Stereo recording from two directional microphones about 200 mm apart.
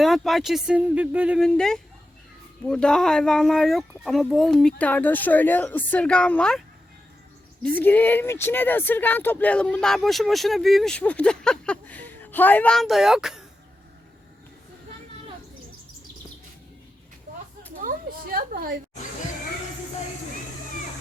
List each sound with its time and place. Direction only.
0.0 s speech: centre (ahead or behind)
7.6 s speech: 10° left (ahead or behind)
17.7 s a sound: 45° right (ahead or behind)